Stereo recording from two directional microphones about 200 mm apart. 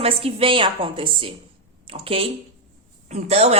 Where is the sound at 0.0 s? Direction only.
30° right (ahead or behind).